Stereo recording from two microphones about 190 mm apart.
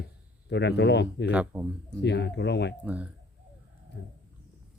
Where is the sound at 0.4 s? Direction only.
65° left (ahead or behind).